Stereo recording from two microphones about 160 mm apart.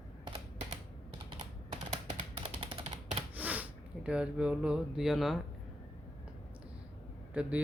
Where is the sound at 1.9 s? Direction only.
35° right (ahead or behind).